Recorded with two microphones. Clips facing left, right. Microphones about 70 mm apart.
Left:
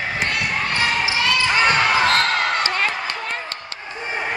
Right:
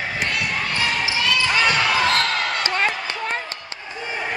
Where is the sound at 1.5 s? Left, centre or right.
Left.